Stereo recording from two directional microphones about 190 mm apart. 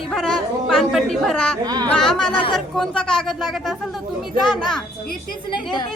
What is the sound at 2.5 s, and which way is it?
Speech, centre (ahead or behind).